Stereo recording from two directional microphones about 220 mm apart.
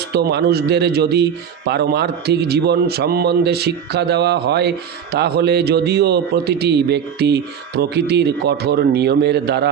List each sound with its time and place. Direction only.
0.1 s speech: 50° right (ahead or behind)